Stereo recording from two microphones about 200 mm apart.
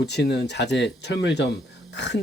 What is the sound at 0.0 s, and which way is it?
Speech, 55° left (ahead or behind).